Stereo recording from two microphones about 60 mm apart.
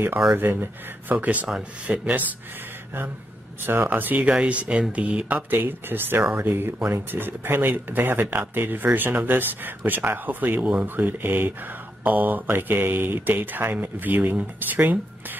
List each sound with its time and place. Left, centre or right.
0.4 s speech: right
1.2 s speech: right
3.6 s speech: right
5.6 s speech: right
10.6 s speech: centre
11.0 s speech: right